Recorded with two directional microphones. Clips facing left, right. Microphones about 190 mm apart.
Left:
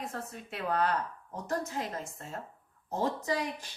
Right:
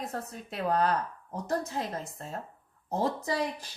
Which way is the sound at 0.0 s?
35° right (ahead or behind).